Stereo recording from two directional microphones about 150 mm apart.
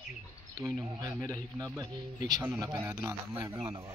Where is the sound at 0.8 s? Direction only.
25° right (ahead or behind).